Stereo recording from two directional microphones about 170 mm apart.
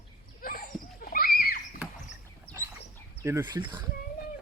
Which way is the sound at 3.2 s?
15° right (ahead or behind).